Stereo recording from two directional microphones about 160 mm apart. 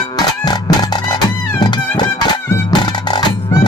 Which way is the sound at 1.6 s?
25° left (ahead or behind).